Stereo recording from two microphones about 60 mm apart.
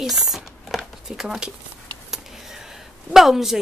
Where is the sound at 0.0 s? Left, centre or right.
Centre.